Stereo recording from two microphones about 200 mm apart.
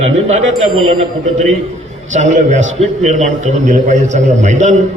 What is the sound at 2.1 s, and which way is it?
A man's voice, 35° right (ahead or behind).